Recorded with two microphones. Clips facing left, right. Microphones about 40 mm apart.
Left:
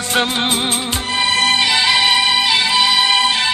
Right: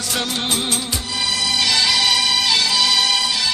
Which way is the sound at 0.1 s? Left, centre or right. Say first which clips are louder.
Left 6 dB; left.